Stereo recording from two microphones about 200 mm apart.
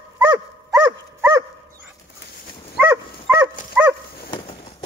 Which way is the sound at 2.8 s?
10° right (ahead or behind).